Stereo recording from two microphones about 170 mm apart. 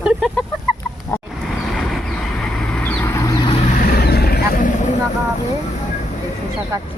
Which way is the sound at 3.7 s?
60° left (ahead or behind).